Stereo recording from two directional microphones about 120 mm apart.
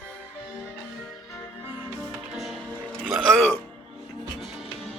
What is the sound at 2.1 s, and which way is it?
Music, centre (ahead or behind).